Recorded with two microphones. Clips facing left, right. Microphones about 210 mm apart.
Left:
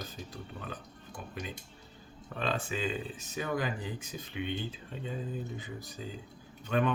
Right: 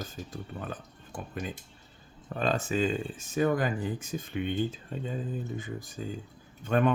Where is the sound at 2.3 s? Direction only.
45° right (ahead or behind).